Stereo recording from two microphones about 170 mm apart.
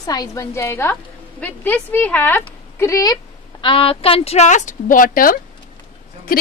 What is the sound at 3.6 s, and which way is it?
A woman's voice, 30° left (ahead or behind).